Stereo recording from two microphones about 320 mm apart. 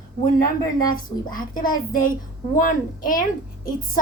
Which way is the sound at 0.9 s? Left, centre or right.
Left.